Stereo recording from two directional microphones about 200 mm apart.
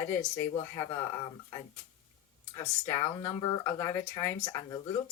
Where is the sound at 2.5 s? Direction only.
15° left (ahead or behind).